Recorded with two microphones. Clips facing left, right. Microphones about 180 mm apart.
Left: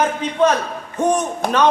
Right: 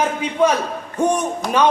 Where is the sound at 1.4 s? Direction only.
60° left (ahead or behind).